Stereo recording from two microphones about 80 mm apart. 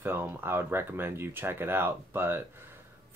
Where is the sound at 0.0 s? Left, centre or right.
Right.